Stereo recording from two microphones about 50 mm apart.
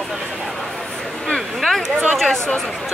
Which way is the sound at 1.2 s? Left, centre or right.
Centre.